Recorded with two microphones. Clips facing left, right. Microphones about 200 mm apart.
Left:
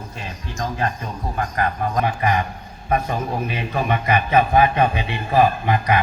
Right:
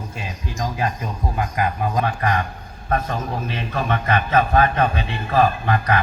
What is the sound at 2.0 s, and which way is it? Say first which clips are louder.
A man's voice: left 1 dB; 15° left (ahead or behind).